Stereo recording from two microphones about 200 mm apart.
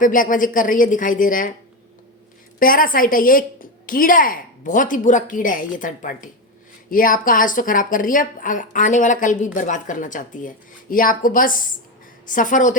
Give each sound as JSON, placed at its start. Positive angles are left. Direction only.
{"t": 0.0, "sound": "a woman's voice", "side_deg": 40}
{"t": 2.6, "sound": "a woman's voice", "side_deg": 45}